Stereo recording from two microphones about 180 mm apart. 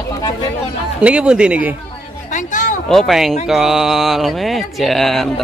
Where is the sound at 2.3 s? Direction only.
45° left (ahead or behind).